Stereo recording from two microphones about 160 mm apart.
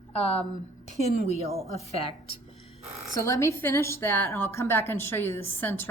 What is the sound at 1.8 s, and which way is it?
Speech, 35° left (ahead or behind).